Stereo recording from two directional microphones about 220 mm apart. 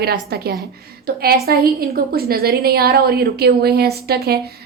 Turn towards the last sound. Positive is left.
turn(degrees=-45)  # may be behind; listen again after turning